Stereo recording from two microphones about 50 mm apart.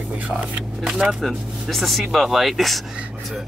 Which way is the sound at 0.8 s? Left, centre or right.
Centre.